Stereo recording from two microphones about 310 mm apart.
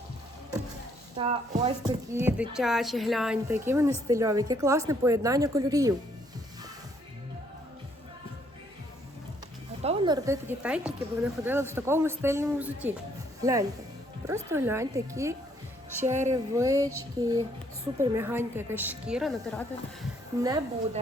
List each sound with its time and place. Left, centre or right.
1.2 s speech: right
1.8 s a woman's voice: centre
9.8 s a woman's voice: centre
20.4 s speech: centre